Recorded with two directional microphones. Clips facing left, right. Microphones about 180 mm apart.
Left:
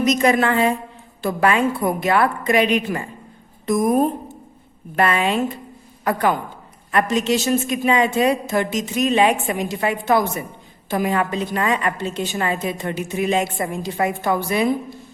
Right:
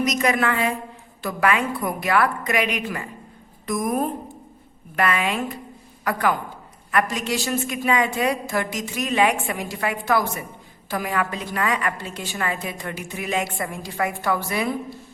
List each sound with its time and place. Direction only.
0.0 s a woman's voice: 30° left (ahead or behind)